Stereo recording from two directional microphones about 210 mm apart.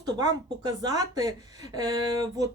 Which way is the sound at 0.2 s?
20° right (ahead or behind).